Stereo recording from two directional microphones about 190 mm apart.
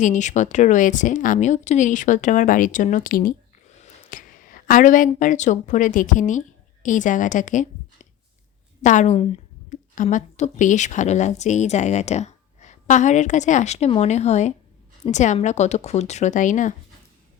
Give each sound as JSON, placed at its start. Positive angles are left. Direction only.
{"t": 0.0, "sound": "speech", "side_deg": 40}
{"t": 8.8, "sound": "a woman's voice", "side_deg": 40}